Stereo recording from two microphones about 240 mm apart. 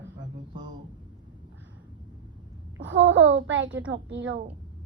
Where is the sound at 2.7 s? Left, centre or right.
Right.